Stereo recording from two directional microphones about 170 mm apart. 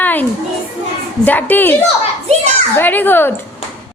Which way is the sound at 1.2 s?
10° left (ahead or behind).